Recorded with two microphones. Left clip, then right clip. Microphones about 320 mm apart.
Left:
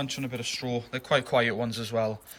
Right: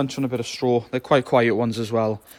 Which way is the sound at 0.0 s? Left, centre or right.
Centre.